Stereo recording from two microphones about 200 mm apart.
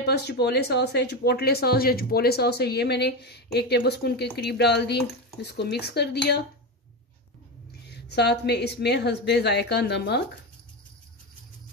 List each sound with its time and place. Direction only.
0.0 s speech: 55° left (ahead or behind)
7.9 s speech: 55° left (ahead or behind)